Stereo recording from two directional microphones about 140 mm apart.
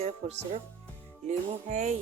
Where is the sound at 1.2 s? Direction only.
55° right (ahead or behind).